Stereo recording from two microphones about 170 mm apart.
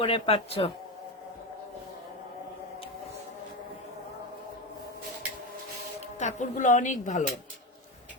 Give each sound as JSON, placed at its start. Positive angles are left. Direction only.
{"t": 0.0, "sound": "speech", "side_deg": 35}
{"t": 6.1, "sound": "speech", "side_deg": 45}